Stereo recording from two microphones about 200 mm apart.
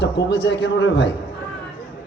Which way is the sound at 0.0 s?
60° left (ahead or behind).